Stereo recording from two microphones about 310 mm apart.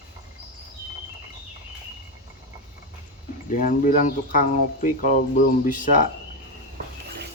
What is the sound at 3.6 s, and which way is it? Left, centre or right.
Speech, left.